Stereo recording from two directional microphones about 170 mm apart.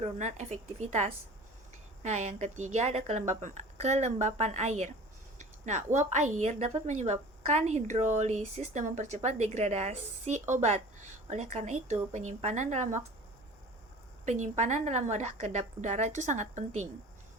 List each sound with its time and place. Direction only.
0.0 s a woman's voice: 40° right (ahead or behind)
14.3 s a woman's voice: 45° right (ahead or behind)